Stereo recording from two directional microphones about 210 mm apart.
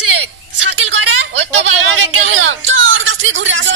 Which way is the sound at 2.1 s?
65° right (ahead or behind).